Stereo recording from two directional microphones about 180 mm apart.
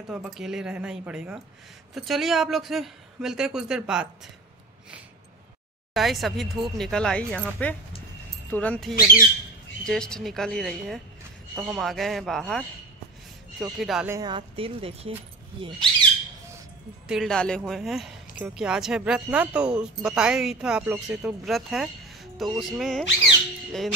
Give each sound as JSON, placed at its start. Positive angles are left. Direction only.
{"t": 0.1, "sound": "speech", "side_deg": -5}
{"t": 5.9, "sound": "speech", "side_deg": 0}
{"t": 14.1, "sound": "speech", "side_deg": -25}
{"t": 17.1, "sound": "speech", "side_deg": 0}